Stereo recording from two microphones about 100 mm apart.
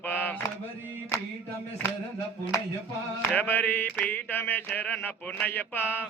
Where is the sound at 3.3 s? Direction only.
20° left (ahead or behind).